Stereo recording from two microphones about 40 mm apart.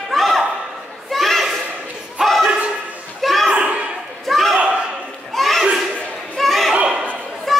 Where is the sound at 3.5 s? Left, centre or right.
Right.